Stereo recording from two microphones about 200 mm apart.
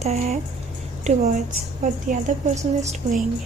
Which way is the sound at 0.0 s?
30° right (ahead or behind).